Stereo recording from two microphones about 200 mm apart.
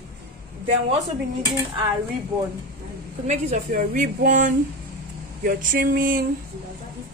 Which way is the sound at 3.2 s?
40° right (ahead or behind).